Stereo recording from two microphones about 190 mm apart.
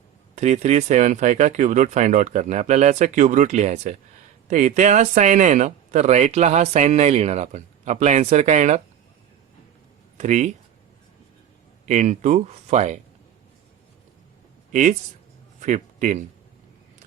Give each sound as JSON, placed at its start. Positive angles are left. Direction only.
{"t": 0.3, "sound": "speech", "side_deg": -35}
{"t": 10.2, "sound": "speech", "side_deg": -40}
{"t": 11.9, "sound": "speech", "side_deg": -35}
{"t": 14.7, "sound": "speech", "side_deg": -40}